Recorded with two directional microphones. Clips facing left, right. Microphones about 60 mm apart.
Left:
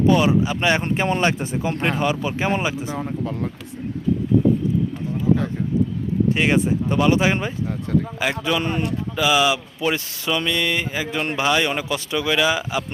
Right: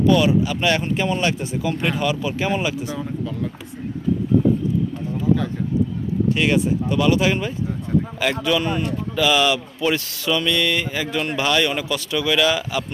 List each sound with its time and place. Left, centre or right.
0.0 s speech: left
0.8 s speech: left
1.2 s speech: left
3.0 s speech: left
6.3 s a man's voice: left
8.6 s speech: left
9.1 s speech: centre